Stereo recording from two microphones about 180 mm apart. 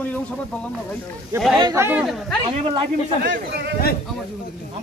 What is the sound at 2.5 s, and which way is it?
Speech, 30° right (ahead or behind).